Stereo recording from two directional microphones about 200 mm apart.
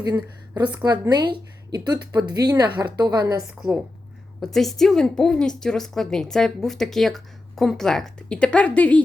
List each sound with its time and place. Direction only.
0.1 s a woman's voice: 10° right (ahead or behind)
0.8 s a woman's voice: 20° right (ahead or behind)
3.4 s a woman's voice: 5° right (ahead or behind)